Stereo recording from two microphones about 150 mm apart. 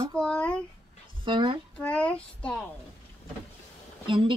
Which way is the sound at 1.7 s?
5° left (ahead or behind).